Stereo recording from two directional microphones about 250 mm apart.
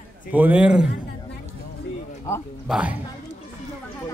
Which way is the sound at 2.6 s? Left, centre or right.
Centre.